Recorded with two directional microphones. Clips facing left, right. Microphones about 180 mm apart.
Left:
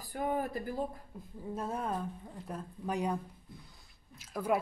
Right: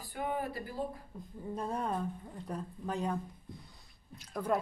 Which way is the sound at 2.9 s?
15° left (ahead or behind).